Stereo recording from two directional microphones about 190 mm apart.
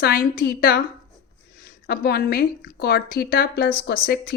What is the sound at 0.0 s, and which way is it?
A woman's voice, 50° left (ahead or behind).